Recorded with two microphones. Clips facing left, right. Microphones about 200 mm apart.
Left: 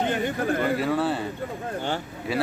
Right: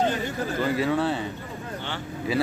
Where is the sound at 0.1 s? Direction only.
55° left (ahead or behind).